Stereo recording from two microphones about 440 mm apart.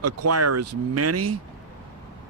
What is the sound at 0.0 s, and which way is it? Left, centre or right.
Speech, right.